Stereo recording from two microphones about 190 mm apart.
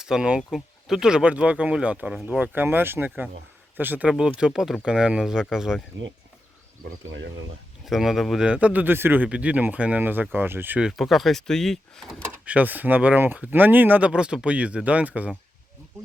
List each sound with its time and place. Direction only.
0.0 s speech: 5° right (ahead or behind)
7.9 s speech: centre (ahead or behind)